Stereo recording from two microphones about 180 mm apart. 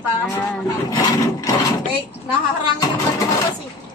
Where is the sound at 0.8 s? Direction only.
20° left (ahead or behind).